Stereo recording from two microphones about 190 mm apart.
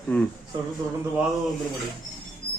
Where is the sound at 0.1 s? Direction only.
5° left (ahead or behind).